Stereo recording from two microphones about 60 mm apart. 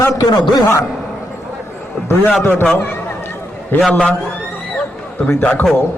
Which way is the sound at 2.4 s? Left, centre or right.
Left.